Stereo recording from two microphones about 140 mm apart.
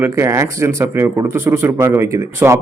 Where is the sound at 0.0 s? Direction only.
20° right (ahead or behind).